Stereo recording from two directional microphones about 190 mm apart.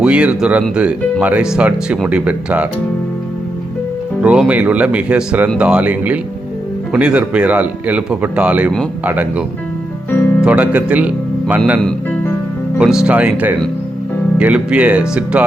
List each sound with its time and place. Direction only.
0.0 s speech: 5° right (ahead or behind)
4.2 s speech: 5° right (ahead or behind)
10.1 s music: 10° left (ahead or behind)
10.4 s speech: 10° right (ahead or behind)
11.8 s music: 5° left (ahead or behind)
12.8 s speech: 5° right (ahead or behind)